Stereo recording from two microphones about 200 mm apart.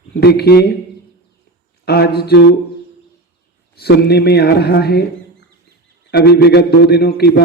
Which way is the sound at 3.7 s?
55° left (ahead or behind).